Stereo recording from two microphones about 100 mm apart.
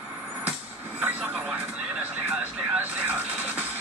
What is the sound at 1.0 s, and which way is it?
Vehicle, 15° right (ahead or behind).